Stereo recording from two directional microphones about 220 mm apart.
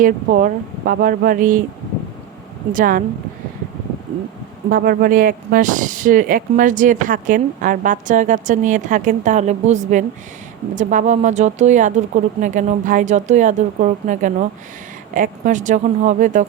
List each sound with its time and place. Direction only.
0.0 s speech: 40° right (ahead or behind)
2.7 s speech: 40° right (ahead or behind)
4.7 s speech: 40° right (ahead or behind)